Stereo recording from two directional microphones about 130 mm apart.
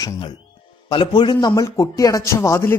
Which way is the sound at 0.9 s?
35° left (ahead or behind).